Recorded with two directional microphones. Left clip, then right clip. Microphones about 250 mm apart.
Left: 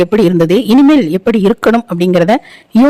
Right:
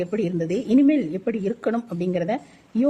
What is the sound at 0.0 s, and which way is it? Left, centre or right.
A woman's voice, left.